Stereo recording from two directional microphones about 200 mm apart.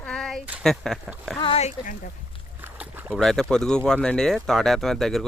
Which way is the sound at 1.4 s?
30° left (ahead or behind).